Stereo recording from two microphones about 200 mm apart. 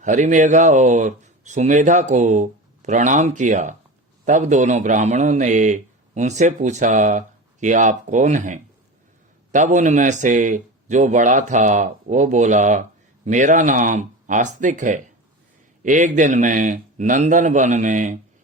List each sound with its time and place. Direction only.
0.0 s a man's voice: 40° right (ahead or behind)